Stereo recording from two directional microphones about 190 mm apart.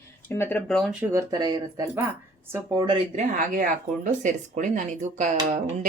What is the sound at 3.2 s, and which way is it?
Speech, 45° right (ahead or behind).